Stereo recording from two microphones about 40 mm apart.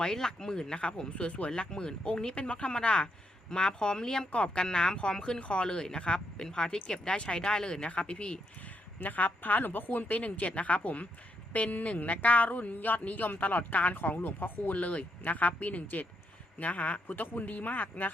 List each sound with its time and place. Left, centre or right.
0.0 s speech: centre
2.3 s speech: left
4.3 s speech: left
9.0 s speech: left